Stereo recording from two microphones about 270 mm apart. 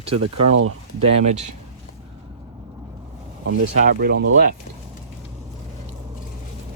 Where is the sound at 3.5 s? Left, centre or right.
Right.